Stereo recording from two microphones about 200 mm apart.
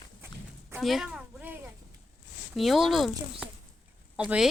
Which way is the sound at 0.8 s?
Centre (ahead or behind).